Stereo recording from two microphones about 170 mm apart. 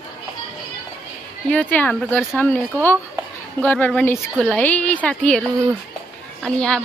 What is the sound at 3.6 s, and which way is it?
A woman's voice, 10° left (ahead or behind).